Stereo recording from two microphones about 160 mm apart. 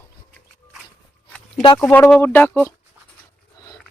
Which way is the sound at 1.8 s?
10° left (ahead or behind).